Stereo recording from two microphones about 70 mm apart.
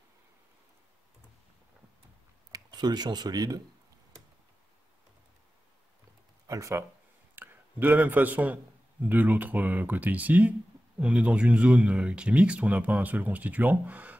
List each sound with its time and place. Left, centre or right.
2.5 s speech: right
6.4 s a sound: right
7.3 s speech: right